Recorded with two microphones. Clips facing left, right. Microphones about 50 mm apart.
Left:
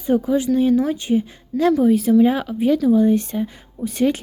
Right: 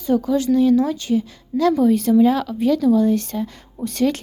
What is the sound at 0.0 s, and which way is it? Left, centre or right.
Speech, left.